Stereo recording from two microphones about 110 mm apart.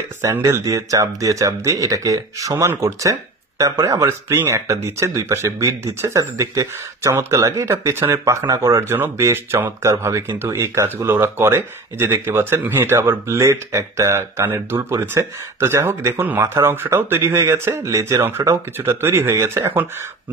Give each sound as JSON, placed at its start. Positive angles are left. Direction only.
{"t": 0.2, "sound": "speech", "side_deg": -25}